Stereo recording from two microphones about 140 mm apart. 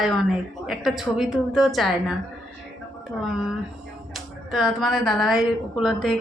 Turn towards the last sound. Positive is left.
turn(degrees=0)  # may be behind; listen again after turning